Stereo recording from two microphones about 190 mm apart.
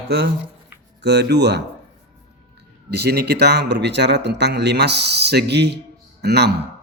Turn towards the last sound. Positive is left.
turn(degrees=-60)  # may be behind; listen again after turning